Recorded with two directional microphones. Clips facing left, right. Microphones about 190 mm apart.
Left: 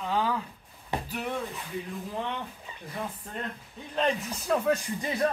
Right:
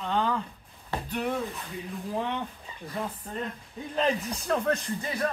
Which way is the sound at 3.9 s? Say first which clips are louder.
Right 1 dB; centre (ahead or behind).